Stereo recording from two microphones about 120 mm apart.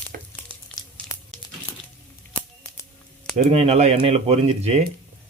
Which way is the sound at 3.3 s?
60° right (ahead or behind).